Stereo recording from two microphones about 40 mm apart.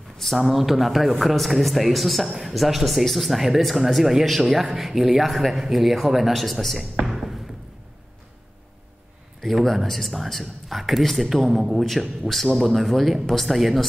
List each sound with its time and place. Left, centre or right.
0.4 s speech: centre
7.1 s a sound: centre
9.4 s speech: centre